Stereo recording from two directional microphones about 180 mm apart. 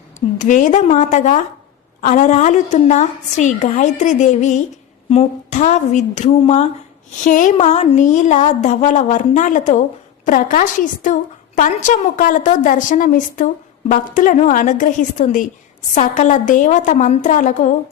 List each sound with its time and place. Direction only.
0.3 s a woman's voice: 45° left (ahead or behind)